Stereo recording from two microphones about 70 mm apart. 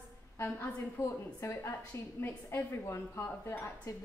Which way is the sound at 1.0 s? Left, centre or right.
Left.